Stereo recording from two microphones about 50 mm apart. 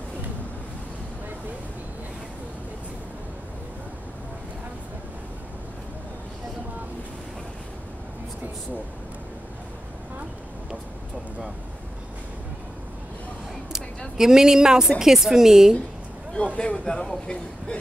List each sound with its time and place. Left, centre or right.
13.7 s a sound: centre
15.0 s speech: centre
16.5 s speech: centre